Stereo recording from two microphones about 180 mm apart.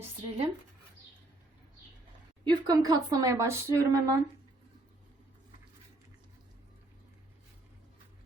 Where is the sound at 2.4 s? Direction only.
20° right (ahead or behind).